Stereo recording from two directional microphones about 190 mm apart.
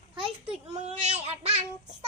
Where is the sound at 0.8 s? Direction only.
35° right (ahead or behind).